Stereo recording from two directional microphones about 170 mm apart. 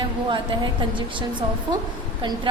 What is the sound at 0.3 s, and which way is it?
A woman's voice, 30° right (ahead or behind).